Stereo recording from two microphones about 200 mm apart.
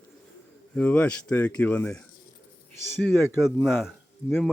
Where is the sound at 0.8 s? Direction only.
10° left (ahead or behind).